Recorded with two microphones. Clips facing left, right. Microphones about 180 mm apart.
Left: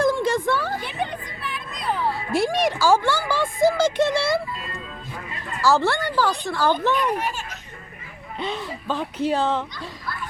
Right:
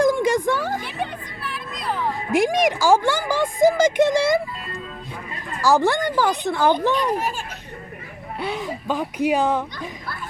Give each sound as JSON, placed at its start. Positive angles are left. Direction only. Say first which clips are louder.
{"t": 0.0, "sound": "a sound", "louder": "right 2 dB", "side_deg": -15}
{"t": 0.8, "sound": "music", "louder": "even", "side_deg": 0}
{"t": 2.1, "sound": "speech", "louder": "right 7 dB", "side_deg": -15}
{"t": 5.6, "sound": "speech", "louder": "right 2 dB", "side_deg": -15}
{"t": 6.9, "sound": "a child's voice", "louder": "right 1 dB", "side_deg": -40}
{"t": 8.4, "sound": "speech", "louder": "right 2 dB", "side_deg": -10}